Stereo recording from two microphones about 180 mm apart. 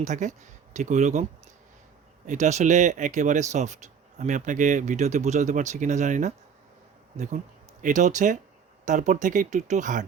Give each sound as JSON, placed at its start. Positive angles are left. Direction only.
{"t": 0.0, "sound": "speech", "side_deg": -40}
{"t": 2.2, "sound": "speech", "side_deg": -40}
{"t": 7.8, "sound": "speech", "side_deg": -45}